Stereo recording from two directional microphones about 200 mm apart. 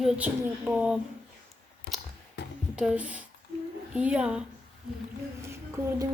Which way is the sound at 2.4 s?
60° left (ahead or behind).